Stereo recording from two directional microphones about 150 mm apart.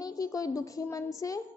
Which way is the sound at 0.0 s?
25° left (ahead or behind).